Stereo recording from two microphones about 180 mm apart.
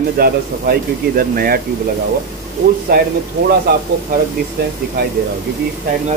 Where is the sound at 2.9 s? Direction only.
55° right (ahead or behind).